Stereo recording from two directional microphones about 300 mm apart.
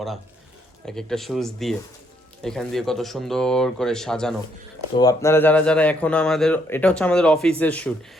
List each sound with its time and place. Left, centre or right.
0.9 s a man's voice: centre